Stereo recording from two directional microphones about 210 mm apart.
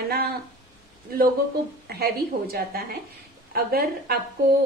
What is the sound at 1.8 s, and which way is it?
A woman's voice, 50° right (ahead or behind).